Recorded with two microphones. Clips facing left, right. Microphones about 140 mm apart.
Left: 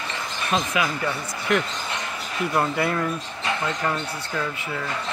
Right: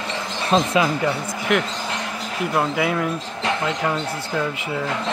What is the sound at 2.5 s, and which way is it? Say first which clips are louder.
Speech: right 2 dB; 5° right (ahead or behind).